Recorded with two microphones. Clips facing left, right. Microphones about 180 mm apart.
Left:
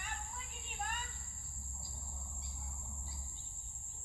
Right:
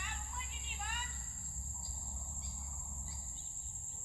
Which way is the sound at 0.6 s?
45° left (ahead or behind).